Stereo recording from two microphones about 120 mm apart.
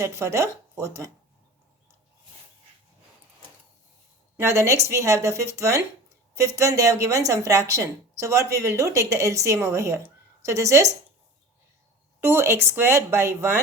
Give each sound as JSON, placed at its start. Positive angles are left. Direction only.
{"t": 0.0, "sound": "a woman's voice", "side_deg": -25}
{"t": 4.4, "sound": "a woman's voice", "side_deg": -25}
{"t": 12.2, "sound": "a woman's voice", "side_deg": -20}